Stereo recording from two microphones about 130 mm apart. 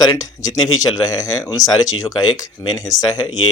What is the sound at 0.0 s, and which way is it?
Speech, 30° left (ahead or behind).